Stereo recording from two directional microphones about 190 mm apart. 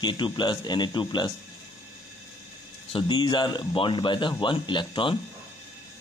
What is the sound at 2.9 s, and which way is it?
Speech, 25° left (ahead or behind).